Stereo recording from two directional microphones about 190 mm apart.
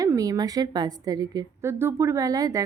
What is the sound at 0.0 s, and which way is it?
A woman's voice, 20° right (ahead or behind).